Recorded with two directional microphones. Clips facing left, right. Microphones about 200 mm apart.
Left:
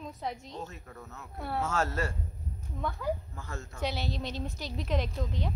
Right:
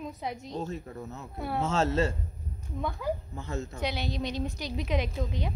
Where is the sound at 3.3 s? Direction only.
20° right (ahead or behind).